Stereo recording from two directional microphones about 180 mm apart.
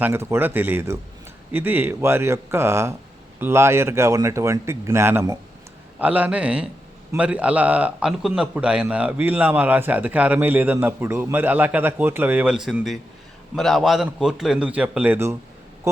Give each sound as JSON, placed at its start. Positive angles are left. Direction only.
{"t": 0.0, "sound": "a man's voice", "side_deg": -15}